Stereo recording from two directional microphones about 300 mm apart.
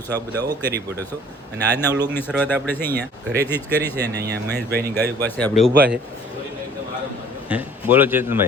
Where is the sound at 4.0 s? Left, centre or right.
Right.